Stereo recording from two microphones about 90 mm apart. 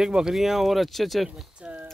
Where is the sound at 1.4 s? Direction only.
15° right (ahead or behind).